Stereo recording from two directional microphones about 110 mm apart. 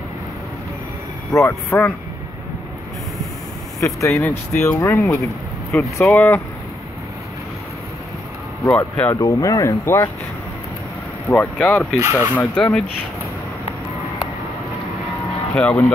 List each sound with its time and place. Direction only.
1.3 s speech: 25° left (ahead or behind)
3.8 s speech: 30° left (ahead or behind)
8.7 s speech: 10° left (ahead or behind)
9.1 s speech: 30° left (ahead or behind)
11.5 s speech: 10° left (ahead or behind)
12.0 s speech: 20° right (ahead or behind)
12.4 s speech: 15° left (ahead or behind)
15.5 s speech: 15° left (ahead or behind)